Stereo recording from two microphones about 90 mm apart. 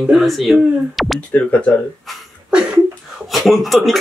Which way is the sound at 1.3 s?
15° left (ahead or behind).